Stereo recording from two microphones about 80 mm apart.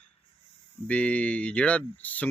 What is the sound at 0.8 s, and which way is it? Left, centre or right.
Speech, centre.